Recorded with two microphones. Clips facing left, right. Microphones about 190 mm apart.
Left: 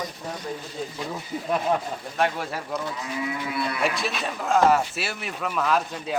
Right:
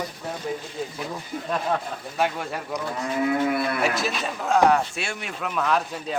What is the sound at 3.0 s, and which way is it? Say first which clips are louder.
Livestock: right 7 dB; 50° right (ahead or behind).